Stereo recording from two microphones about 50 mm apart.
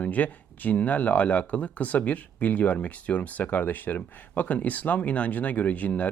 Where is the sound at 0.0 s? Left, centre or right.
Left.